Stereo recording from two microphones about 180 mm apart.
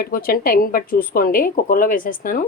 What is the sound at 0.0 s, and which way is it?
A woman's voice, 55° left (ahead or behind).